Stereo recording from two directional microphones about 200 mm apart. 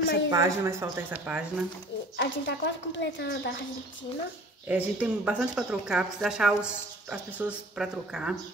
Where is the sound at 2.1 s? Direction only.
60° left (ahead or behind).